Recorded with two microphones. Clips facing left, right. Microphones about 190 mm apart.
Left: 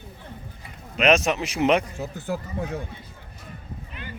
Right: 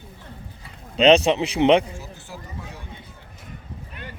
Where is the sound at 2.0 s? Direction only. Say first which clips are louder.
Left 9 dB; 55° left (ahead or behind).